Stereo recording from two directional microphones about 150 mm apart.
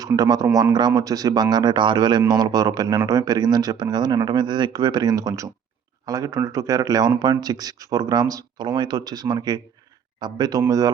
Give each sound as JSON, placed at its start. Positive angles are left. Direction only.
{"t": 0.0, "sound": "speech", "side_deg": -25}